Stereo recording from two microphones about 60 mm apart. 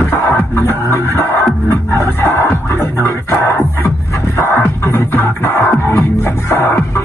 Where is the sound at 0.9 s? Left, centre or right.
Left.